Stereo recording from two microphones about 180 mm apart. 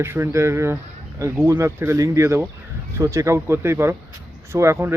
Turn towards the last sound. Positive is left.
turn(degrees=-15)  # may be behind; listen again after turning